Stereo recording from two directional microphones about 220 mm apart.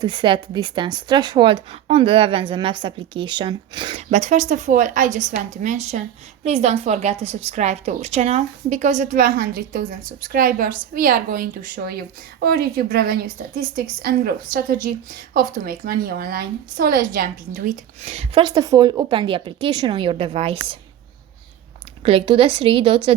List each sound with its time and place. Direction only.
0.0 s a woman's voice: 20° right (ahead or behind)
22.0 s a woman's voice: 25° right (ahead or behind)